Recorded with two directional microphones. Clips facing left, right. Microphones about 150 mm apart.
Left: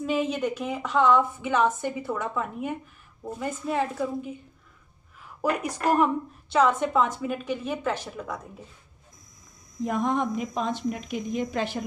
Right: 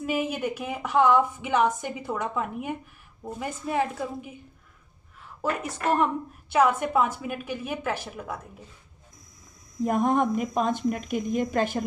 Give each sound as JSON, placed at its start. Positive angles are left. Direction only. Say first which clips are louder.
{"t": 0.0, "sound": "a woman's voice", "louder": "left 2 dB", "side_deg": -10}
{"t": 5.4, "sound": "a woman's voice", "louder": "left 2 dB", "side_deg": 10}
{"t": 6.5, "sound": "a woman's voice", "louder": "even", "side_deg": -10}
{"t": 9.8, "sound": "speech", "louder": "right 3 dB", "side_deg": -50}